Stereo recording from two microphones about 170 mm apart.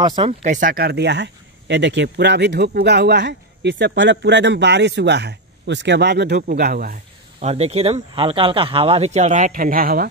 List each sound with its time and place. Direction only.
0.0 s speech: 30° right (ahead or behind)
0.4 s speech: 50° right (ahead or behind)
7.4 s speech: 40° right (ahead or behind); by 10.0 s 60° right (ahead or behind)